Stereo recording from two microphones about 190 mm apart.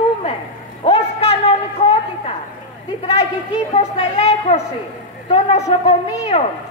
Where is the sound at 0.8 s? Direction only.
30° left (ahead or behind).